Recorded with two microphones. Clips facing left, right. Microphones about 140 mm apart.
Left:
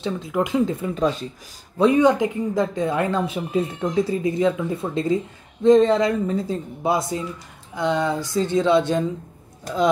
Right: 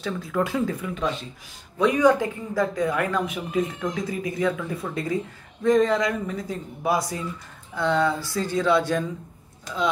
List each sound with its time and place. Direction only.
0.0 s speech: 20° left (ahead or behind)